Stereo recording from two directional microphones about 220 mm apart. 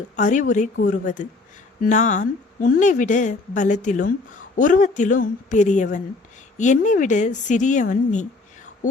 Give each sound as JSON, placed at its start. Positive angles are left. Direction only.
{"t": 0.2, "sound": "a woman's voice", "side_deg": 35}